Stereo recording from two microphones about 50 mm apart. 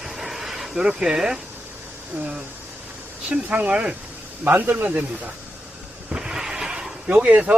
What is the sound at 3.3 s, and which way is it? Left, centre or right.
Speech, right.